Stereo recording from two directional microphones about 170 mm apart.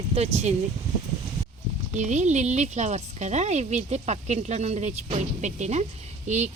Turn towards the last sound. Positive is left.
turn(degrees=-45)  # may be behind; listen again after turning